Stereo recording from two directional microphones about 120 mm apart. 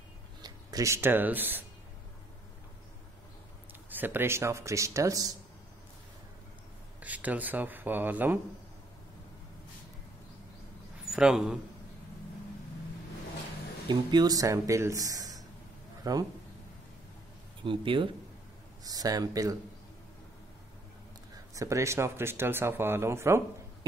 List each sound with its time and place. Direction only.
0.4 s speech: 30° right (ahead or behind); by 1.6 s 15° right (ahead or behind)
3.9 s speech: 15° right (ahead or behind)
7.0 s speech: 15° right (ahead or behind)
11.1 s a man's voice: 5° right (ahead or behind)
13.8 s speech: 35° right (ahead or behind)
17.6 s speech: 45° right (ahead or behind)
18.9 s speech: 30° right (ahead or behind)
21.5 s speech: 25° right (ahead or behind)